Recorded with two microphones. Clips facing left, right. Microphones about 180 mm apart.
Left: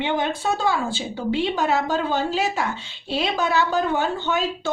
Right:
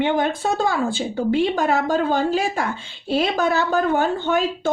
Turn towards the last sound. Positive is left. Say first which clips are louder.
# right 4 dB
turn(degrees=-50)  # may be behind; listen again after turning